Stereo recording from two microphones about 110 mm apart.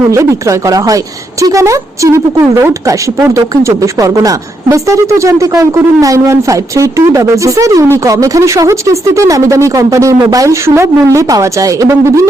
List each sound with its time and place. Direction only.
0.1 s speech: 30° right (ahead or behind)